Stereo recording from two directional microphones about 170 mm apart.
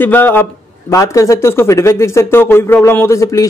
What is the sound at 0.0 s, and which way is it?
A man's voice, 10° left (ahead or behind).